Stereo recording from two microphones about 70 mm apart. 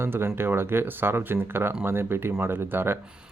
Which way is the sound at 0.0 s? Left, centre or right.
Right.